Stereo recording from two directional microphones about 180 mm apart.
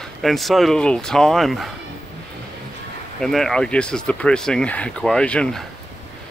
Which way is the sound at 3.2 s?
Centre (ahead or behind).